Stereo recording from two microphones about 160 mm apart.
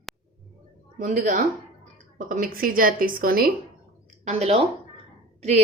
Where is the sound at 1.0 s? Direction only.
55° right (ahead or behind).